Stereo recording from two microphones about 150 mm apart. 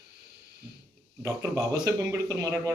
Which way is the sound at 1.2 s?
20° right (ahead or behind).